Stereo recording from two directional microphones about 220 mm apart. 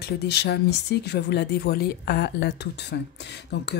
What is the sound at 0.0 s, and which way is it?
Speech, 50° left (ahead or behind).